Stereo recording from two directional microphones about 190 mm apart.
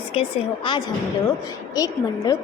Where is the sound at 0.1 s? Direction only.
30° left (ahead or behind).